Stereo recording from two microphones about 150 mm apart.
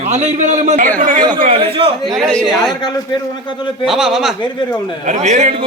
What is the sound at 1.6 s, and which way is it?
Speech, 35° right (ahead or behind).